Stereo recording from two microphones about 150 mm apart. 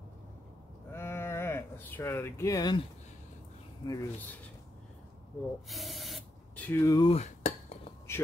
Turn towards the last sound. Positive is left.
turn(degrees=45)  # may be behind; listen again after turning